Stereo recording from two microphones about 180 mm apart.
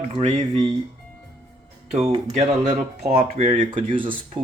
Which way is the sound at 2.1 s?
35° right (ahead or behind).